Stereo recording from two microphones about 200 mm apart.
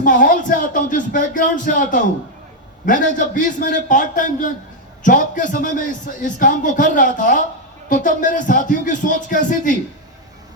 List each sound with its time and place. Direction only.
0.0 s speech: 40° left (ahead or behind)